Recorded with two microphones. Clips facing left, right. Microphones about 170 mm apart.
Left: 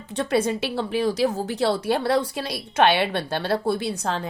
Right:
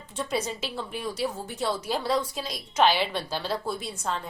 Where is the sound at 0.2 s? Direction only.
60° left (ahead or behind).